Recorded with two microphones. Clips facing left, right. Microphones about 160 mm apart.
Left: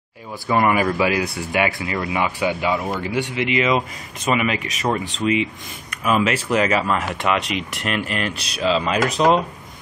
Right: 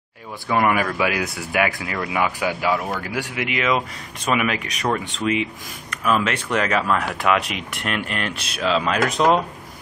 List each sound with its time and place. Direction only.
0.5 s speech: centre (ahead or behind)